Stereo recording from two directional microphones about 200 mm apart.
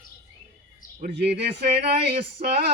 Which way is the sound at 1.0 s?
55° right (ahead or behind).